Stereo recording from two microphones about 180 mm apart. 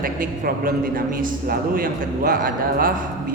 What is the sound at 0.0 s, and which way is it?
A man's voice, 50° right (ahead or behind).